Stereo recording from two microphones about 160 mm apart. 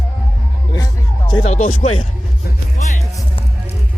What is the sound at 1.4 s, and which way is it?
Speech, 45° left (ahead or behind).